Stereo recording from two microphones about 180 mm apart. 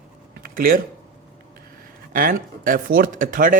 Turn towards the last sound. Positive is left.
turn(degrees=-50)  # may be behind; listen again after turning